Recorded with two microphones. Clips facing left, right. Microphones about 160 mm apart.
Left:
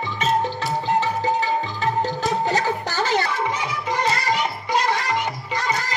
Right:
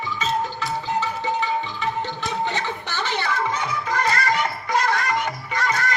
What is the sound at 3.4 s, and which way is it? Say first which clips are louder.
Music: even; 20° left (ahead or behind).